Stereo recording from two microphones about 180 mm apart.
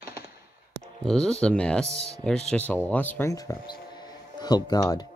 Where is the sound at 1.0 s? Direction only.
5° left (ahead or behind).